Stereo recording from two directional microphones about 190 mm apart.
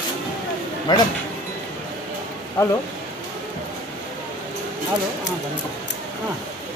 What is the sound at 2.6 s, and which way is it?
Speech, 10° left (ahead or behind).